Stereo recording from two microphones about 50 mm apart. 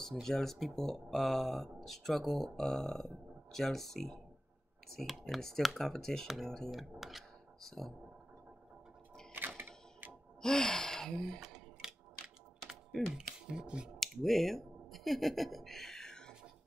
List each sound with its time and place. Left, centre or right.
0.0 s speech: centre
9.6 s typewriter: right
10.4 s speech: centre
11.4 s a sound: centre
13.0 s speech: centre
13.9 s a sound: centre